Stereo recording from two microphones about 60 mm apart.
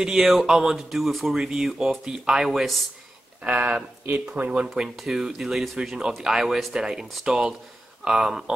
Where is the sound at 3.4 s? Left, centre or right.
Right.